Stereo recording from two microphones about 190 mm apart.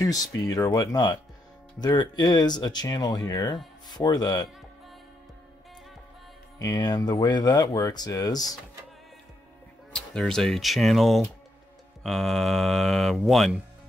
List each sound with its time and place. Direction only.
0.0 s speech: 20° left (ahead or behind)
6.6 s speech: 20° left (ahead or behind)
9.9 s speech: 5° left (ahead or behind)